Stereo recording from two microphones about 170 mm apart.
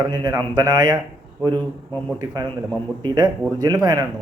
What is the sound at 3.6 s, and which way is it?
Speech, 20° right (ahead or behind).